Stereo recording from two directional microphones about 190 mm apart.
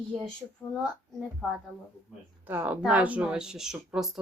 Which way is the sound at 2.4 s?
10° right (ahead or behind).